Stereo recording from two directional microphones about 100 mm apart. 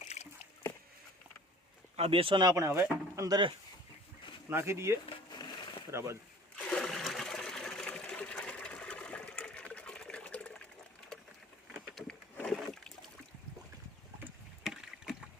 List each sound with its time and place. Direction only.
2.0 s speech: 65° right (ahead or behind)
2.4 s speech: 35° right (ahead or behind)
3.2 s speech: 40° right (ahead or behind)
4.4 s speech: 25° right (ahead or behind)
5.3 s a sound: 45° left (ahead or behind)
5.9 s speech: 30° right (ahead or behind)
6.6 s water: 10° left (ahead or behind)
11.7 s a sound: centre (ahead or behind)
12.5 s boat: 5° left (ahead or behind)
14.6 s rowboat: centre (ahead or behind)